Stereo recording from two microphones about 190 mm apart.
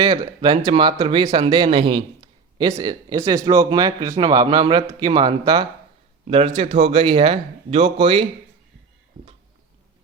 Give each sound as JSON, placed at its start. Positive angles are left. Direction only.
{"t": 0.0, "sound": "speech", "side_deg": -20}